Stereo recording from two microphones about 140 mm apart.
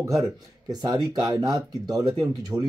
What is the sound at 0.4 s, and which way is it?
A man's voice, 30° right (ahead or behind).